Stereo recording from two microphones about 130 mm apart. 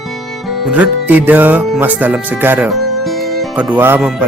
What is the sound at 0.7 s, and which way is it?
Speech, 10° right (ahead or behind).